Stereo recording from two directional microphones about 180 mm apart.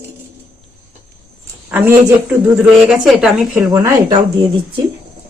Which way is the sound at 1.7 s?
10° right (ahead or behind).